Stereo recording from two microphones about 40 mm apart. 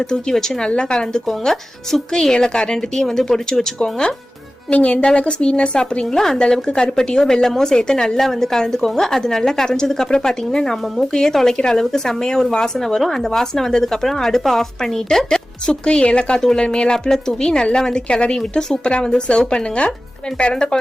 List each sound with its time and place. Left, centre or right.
0.0 s speech: centre
2.3 s a woman's voice: left
4.7 s a woman's voice: left
6.1 s speech: centre
6.7 s a woman's voice: left
6.9 s speech: centre
16.4 s a woman's voice: centre